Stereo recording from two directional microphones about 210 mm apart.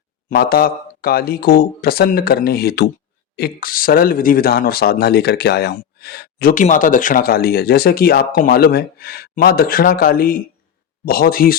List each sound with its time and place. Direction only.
0.3 s speech: 45° left (ahead or behind)